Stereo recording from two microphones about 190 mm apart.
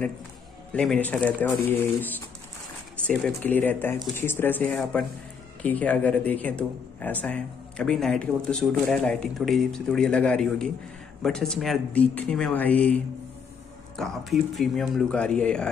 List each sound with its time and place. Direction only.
0.7 s speech: 5° left (ahead or behind)